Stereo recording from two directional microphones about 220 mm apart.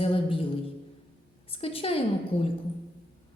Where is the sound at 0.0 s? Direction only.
25° left (ahead or behind).